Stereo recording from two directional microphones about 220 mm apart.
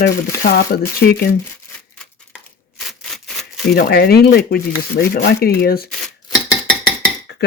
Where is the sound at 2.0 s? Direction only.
Centre (ahead or behind).